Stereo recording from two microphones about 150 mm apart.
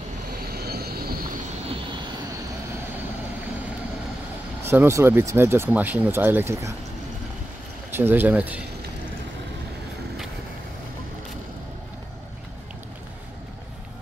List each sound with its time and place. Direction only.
0.4 s vehicle: 90° right
4.6 s speech: 15° right (ahead or behind)
7.9 s speech: 15° right (ahead or behind)